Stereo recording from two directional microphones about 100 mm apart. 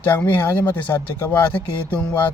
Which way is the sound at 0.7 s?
30° left (ahead or behind).